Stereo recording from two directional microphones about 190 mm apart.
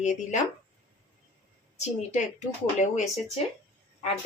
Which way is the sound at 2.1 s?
40° left (ahead or behind).